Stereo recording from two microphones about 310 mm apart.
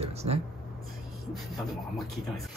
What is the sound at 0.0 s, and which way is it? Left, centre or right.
Speech, centre.